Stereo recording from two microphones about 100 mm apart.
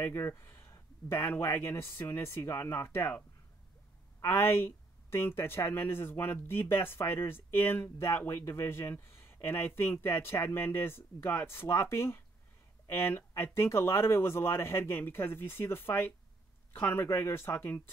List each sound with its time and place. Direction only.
0.0 s speech: 25° left (ahead or behind)
4.2 s speech: 25° left (ahead or behind)